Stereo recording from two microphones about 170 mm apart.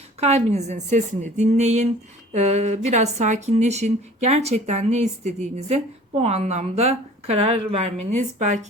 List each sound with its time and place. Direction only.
0.2 s a woman's voice: 40° right (ahead or behind)